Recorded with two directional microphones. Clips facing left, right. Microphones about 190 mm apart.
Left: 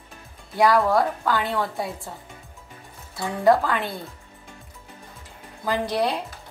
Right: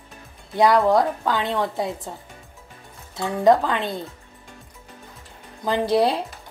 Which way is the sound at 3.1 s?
20° right (ahead or behind).